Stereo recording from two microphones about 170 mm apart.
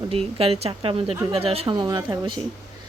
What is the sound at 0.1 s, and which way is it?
Speech, 35° right (ahead or behind).